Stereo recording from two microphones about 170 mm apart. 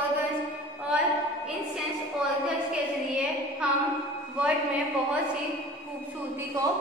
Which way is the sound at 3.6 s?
5° right (ahead or behind).